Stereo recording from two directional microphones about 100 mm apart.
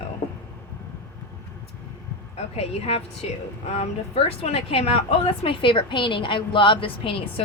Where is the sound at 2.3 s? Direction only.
90° left; by 7.1 s 60° left (ahead or behind).